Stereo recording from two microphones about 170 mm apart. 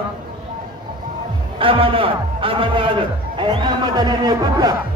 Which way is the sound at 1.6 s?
30° right (ahead or behind).